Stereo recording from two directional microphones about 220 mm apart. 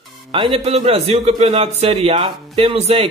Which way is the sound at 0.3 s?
25° right (ahead or behind).